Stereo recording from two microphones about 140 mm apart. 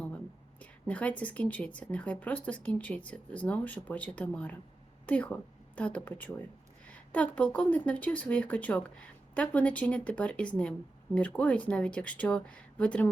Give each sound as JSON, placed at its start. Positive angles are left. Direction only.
{"t": 0.6, "sound": "speech", "side_deg": 10}